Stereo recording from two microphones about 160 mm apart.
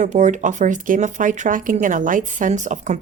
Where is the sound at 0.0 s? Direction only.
50° right (ahead or behind).